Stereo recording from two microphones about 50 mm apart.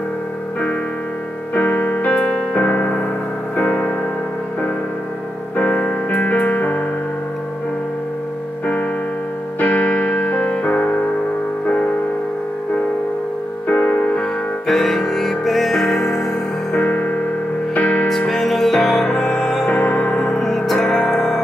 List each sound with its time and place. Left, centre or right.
1.5 s music: left
2.5 s piano: left
3.5 s music: left
5.6 s music: left
9.6 s music: left
13.7 s music: left
14.7 s music: centre
16.7 s music: left
18.0 s music: centre
19.7 s music: left; by 21.4 s centre